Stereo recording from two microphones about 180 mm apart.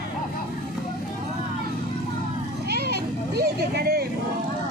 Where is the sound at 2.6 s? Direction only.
60° right (ahead or behind).